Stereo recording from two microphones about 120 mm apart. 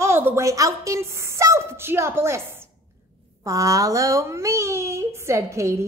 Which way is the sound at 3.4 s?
30° right (ahead or behind).